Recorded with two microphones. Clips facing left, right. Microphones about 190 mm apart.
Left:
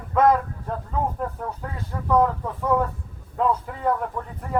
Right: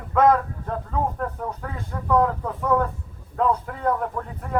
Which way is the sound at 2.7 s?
10° left (ahead or behind).